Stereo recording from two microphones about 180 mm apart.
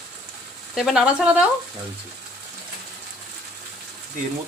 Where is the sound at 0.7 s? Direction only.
Centre (ahead or behind).